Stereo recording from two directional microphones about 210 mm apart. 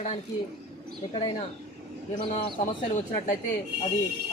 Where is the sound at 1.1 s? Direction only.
25° left (ahead or behind).